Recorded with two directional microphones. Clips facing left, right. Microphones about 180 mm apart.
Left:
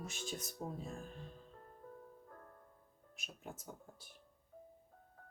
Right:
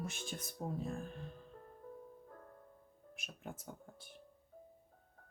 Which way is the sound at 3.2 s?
55° right (ahead or behind).